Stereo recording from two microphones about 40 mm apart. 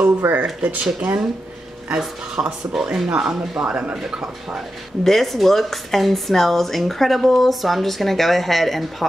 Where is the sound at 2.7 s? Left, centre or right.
Centre.